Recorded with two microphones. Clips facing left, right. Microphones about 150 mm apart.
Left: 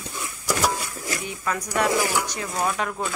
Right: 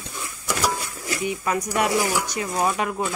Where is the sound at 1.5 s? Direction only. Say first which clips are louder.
Even; 15° right (ahead or behind).